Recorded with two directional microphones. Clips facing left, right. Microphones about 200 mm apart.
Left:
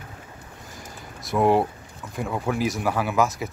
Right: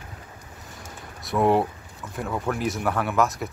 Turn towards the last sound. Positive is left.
turn(degrees=0)  # may be behind; listen again after turning